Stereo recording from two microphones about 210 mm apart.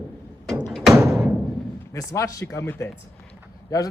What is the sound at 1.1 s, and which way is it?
Music, 10° right (ahead or behind).